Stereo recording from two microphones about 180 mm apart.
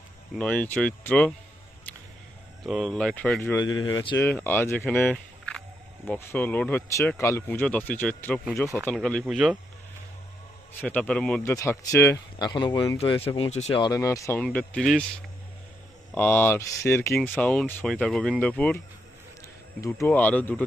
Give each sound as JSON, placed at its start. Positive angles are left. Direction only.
{"t": 0.3, "sound": "speech", "side_deg": 10}
{"t": 2.6, "sound": "speech", "side_deg": 0}
{"t": 3.8, "sound": "speech", "side_deg": 30}
{"t": 4.2, "sound": "speech", "side_deg": 10}
{"t": 10.8, "sound": "speech", "side_deg": 10}
{"t": 11.5, "sound": "speech", "side_deg": 15}
{"t": 13.3, "sound": "speech", "side_deg": 35}
{"t": 13.7, "sound": "speech", "side_deg": 20}
{"t": 16.1, "sound": "speech", "side_deg": 10}